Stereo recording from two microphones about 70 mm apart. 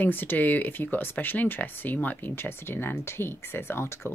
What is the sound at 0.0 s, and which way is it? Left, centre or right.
Speech, left.